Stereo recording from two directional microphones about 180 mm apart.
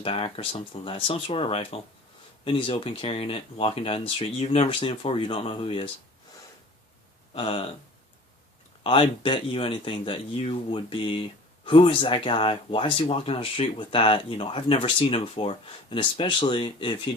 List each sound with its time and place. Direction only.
0.0 s speech: 35° left (ahead or behind)
7.3 s speech: 30° left (ahead or behind)
8.8 s speech: 30° left (ahead or behind)